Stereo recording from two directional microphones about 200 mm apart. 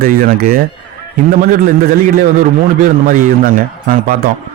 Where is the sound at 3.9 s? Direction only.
45° right (ahead or behind).